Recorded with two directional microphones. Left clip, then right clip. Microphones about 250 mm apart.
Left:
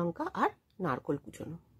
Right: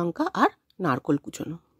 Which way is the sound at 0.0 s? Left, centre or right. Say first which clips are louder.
Right 8 dB; right.